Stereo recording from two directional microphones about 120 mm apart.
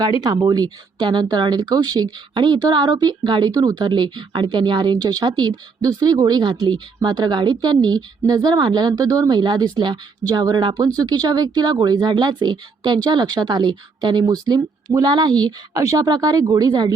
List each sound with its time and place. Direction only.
0.0 s speech: 35° right (ahead or behind)